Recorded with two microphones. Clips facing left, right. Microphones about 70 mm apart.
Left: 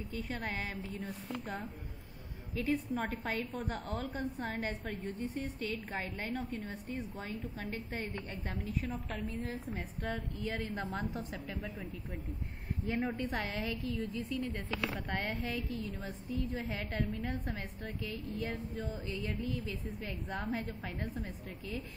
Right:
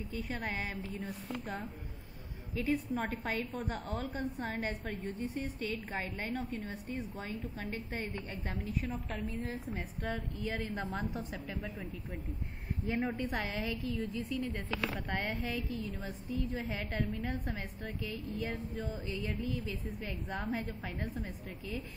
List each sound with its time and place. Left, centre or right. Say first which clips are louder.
0.3 s speech: right 1 dB; centre
9.4 s a woman's voice: even; centre
10.0 s speech: even; centre
10.6 s a woman's voice: even; centre
11.0 s speech: even; centre
12.8 s speech: right 1 dB; centre